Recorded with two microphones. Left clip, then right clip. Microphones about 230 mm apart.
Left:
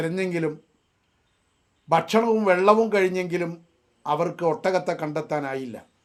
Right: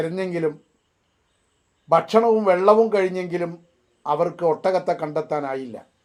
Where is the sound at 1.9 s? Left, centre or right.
Left.